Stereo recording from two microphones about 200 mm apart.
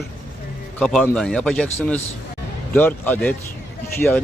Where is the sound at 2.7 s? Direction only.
10° left (ahead or behind).